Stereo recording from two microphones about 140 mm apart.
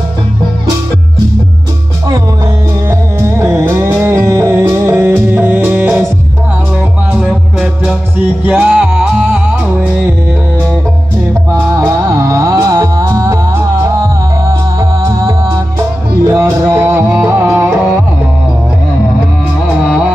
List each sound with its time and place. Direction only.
2.9 s music: 20° right (ahead or behind)
7.8 s music: 10° right (ahead or behind)
11.7 s music: 20° right (ahead or behind)